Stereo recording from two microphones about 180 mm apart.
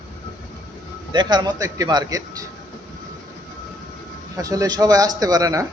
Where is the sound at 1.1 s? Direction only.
25° right (ahead or behind).